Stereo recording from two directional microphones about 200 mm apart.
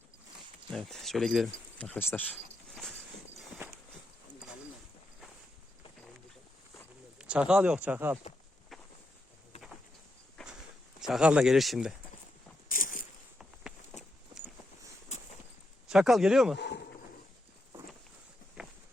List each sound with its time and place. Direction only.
0.7 s speech: centre (ahead or behind)
3.6 s a sound: 10° right (ahead or behind)
7.2 s speech: 5° right (ahead or behind)
8.7 s a sound: centre (ahead or behind)
10.4 s walk: 5° left (ahead or behind)
11.0 s speech: 5° right (ahead or behind)
12.6 s a sound: 45° left (ahead or behind)
15.9 s speech: centre (ahead or behind)
16.6 s speech: 55° left (ahead or behind)
18.6 s walk: 5° right (ahead or behind)